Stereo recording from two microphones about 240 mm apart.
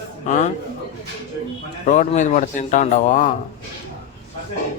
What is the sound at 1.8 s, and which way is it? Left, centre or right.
A man's voice, left.